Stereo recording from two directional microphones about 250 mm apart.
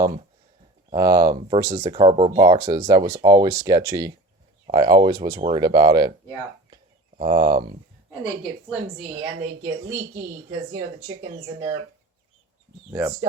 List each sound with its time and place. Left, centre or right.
0.9 s speech: centre
7.2 s speech: centre
9.1 s speech: centre
11.2 s speech: centre
12.9 s speech: centre